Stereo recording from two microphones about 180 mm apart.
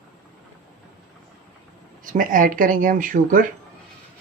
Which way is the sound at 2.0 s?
50° right (ahead or behind).